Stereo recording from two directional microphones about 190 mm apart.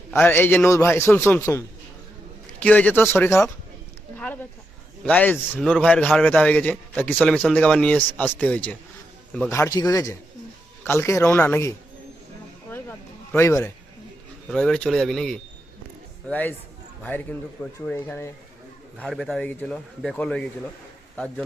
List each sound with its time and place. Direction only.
0.1 s a man's voice: 10° left (ahead or behind)
5.0 s a man's voice: 10° left (ahead or behind)
12.7 s a sound: 10° left (ahead or behind)
14.4 s a man's voice: 5° left (ahead or behind)